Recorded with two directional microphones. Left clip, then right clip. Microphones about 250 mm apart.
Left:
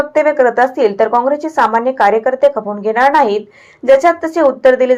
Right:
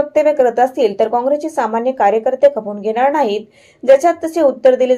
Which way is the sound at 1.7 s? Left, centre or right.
Left.